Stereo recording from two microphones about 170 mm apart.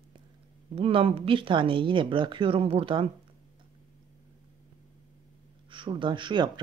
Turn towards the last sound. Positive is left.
turn(degrees=-25)  # may be behind; listen again after turning